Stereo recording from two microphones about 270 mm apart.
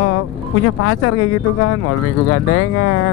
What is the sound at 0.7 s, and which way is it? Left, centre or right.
Speech, left.